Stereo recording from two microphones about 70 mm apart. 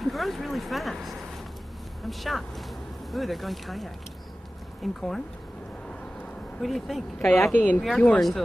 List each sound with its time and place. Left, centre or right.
0.0 s speech: centre
6.6 s speech: centre
7.5 s speech: left